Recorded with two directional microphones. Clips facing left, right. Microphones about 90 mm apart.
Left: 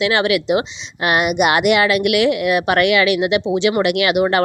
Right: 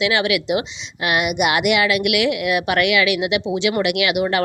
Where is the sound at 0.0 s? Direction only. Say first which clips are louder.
Left 3 dB; 35° left (ahead or behind).